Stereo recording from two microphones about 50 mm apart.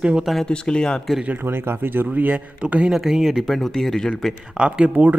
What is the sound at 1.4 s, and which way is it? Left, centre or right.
Speech, right.